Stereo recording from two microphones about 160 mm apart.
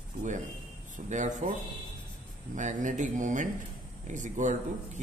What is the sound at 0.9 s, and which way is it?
Speech, 50° right (ahead or behind).